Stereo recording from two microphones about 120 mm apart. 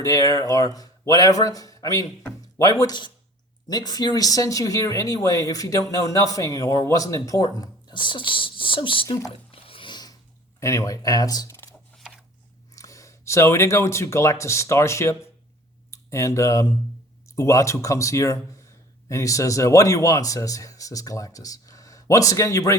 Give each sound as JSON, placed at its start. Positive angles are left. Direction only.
{"t": 0.0, "sound": "a man's voice", "side_deg": 30}
{"t": 9.0, "sound": "speech", "side_deg": 30}
{"t": 9.3, "sound": "a sound", "side_deg": 50}
{"t": 10.6, "sound": "speech", "side_deg": 25}
{"t": 12.7, "sound": "speech", "side_deg": 25}